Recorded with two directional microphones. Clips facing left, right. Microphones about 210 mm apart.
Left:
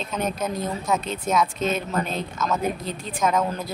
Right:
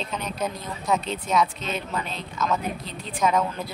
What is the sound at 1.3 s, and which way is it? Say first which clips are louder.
Speech: left 2 dB; 45° left (ahead or behind).